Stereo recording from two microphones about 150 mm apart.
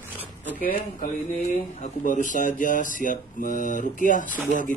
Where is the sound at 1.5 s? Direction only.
55° left (ahead or behind).